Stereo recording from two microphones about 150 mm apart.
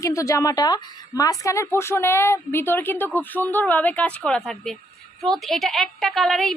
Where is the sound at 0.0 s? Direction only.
20° left (ahead or behind).